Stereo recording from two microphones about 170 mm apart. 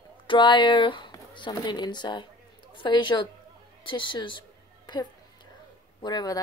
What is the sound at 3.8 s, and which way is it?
Music, 30° left (ahead or behind).